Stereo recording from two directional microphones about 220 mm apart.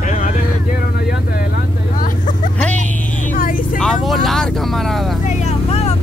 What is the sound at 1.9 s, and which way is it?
Vehicle, 35° left (ahead or behind).